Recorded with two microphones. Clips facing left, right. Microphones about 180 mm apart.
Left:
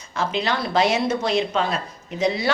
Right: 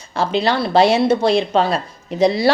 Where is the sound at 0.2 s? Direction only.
35° right (ahead or behind).